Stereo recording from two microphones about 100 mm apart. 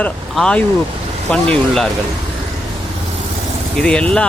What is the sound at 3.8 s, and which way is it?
Speech, 10° left (ahead or behind).